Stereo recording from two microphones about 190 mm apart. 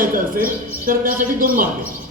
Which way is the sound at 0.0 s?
45° right (ahead or behind).